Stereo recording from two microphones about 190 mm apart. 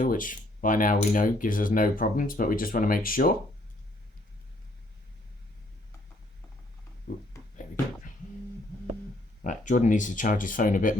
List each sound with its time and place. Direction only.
0.0 s speech: 45° left (ahead or behind)
7.1 s speech: 40° left (ahead or behind)
7.5 s a sound: 40° left (ahead or behind)
9.4 s speech: 45° left (ahead or behind)